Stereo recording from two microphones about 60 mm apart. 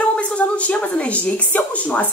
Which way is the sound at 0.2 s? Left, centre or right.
Left.